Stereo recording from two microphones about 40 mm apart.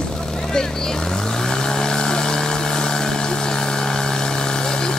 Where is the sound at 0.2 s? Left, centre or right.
Centre.